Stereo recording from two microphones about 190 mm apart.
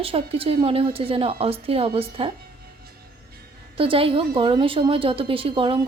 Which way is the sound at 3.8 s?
30° right (ahead or behind).